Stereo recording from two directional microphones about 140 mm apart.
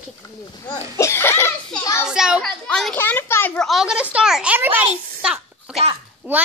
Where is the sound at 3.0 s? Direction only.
15° left (ahead or behind).